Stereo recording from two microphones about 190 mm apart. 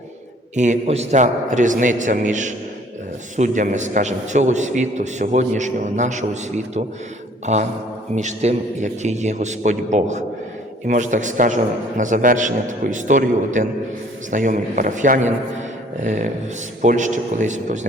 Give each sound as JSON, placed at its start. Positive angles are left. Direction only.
{"t": 0.5, "sound": "a man's voice", "side_deg": -40}